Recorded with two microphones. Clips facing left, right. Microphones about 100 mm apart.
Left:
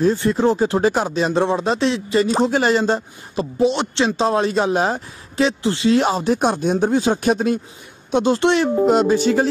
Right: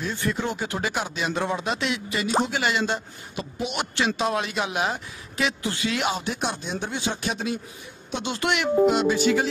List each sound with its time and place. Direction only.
0.0 s speech: 30° left (ahead or behind)